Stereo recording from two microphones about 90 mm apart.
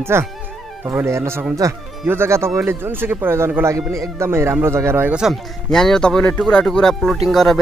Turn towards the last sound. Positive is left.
turn(degrees=5)  # may be behind; listen again after turning